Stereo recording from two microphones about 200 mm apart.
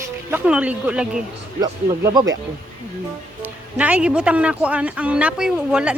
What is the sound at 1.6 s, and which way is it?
Speech, 15° right (ahead or behind).